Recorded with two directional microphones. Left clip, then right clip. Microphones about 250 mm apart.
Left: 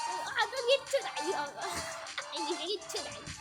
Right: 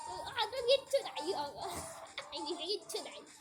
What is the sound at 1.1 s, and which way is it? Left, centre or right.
Speech, left.